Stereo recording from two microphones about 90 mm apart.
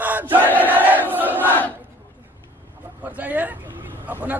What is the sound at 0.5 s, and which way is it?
Crowd, 20° right (ahead or behind).